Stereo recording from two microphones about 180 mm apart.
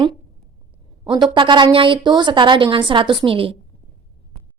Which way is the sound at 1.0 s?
25° right (ahead or behind).